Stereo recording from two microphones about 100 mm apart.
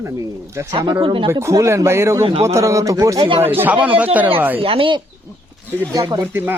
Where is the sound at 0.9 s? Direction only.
55° right (ahead or behind).